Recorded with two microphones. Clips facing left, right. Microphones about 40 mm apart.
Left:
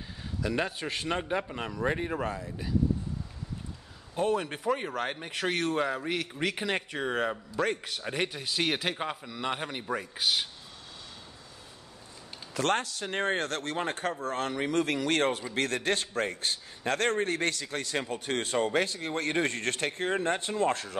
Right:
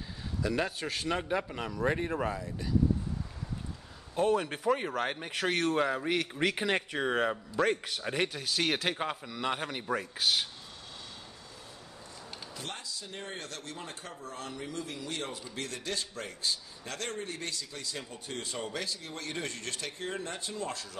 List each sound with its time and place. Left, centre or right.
0.4 s speech: centre
4.1 s speech: centre
12.5 s a man's voice: left